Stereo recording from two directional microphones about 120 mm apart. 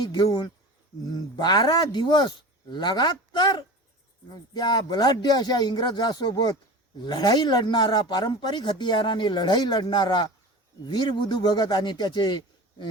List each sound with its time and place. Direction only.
0.0 s speech: 35° left (ahead or behind)